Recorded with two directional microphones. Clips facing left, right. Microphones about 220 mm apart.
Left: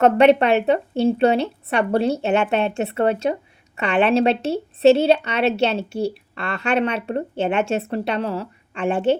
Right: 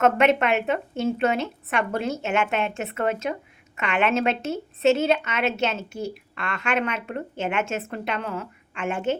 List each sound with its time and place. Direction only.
0.0 s a woman's voice: 35° left (ahead or behind)